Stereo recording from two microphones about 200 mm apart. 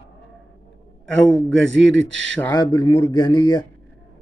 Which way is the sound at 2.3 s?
15° left (ahead or behind).